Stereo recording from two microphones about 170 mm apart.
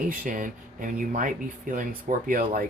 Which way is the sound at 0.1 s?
55° right (ahead or behind).